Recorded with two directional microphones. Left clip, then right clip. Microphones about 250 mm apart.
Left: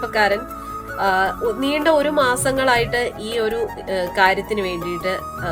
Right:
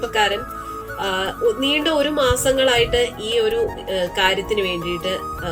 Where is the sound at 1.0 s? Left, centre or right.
Left.